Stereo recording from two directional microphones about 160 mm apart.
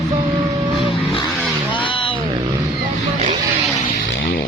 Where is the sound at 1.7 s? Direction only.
35° left (ahead or behind).